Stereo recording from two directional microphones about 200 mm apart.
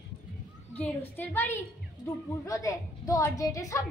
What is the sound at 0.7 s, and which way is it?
A woman's voice, 10° left (ahead or behind).